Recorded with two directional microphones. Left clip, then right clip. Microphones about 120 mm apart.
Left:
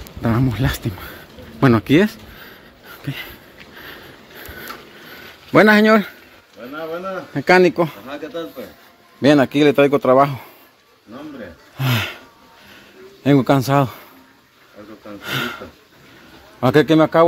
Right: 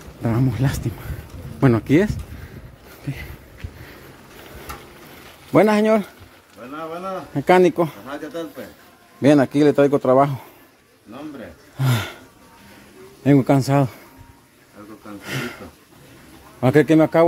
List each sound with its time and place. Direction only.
0.2 s speech: 5° right (ahead or behind)
5.5 s speech: centre (ahead or behind)
7.3 s speech: 15° right (ahead or behind)
9.2 s speech: 15° right (ahead or behind)
11.7 s speech: 20° right (ahead or behind)
13.2 s speech: 15° right (ahead or behind)
15.2 s speech: 15° right (ahead or behind)
16.6 s speech: 20° right (ahead or behind)